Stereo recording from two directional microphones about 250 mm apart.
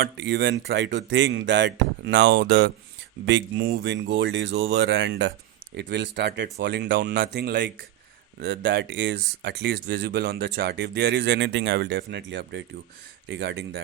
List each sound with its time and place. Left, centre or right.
0.0 s speech: right